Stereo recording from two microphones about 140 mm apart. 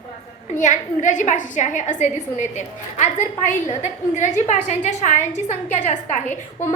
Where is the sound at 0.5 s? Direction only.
60° left (ahead or behind).